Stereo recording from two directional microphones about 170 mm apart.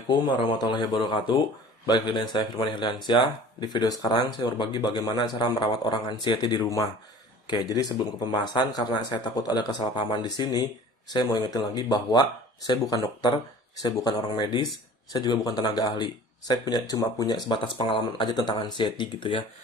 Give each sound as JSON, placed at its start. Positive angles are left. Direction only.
{"t": 0.4, "sound": "speech", "side_deg": 25}